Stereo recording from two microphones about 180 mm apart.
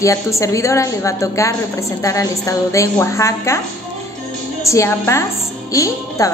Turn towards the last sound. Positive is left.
turn(degrees=20)  # may be behind; listen again after turning